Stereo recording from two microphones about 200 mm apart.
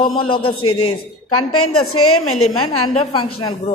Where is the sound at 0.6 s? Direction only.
90° left.